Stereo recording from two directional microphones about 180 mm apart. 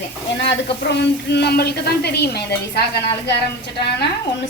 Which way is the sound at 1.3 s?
65° left (ahead or behind).